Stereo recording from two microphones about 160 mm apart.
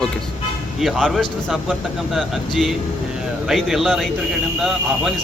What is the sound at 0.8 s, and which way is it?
A man's voice, centre (ahead or behind).